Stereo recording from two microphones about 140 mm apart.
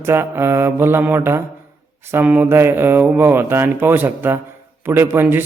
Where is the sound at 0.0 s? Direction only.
20° right (ahead or behind).